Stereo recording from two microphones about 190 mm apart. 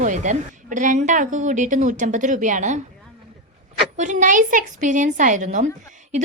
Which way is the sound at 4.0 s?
40° right (ahead or behind).